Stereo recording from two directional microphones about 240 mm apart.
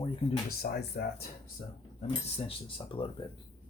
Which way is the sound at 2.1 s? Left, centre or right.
Left.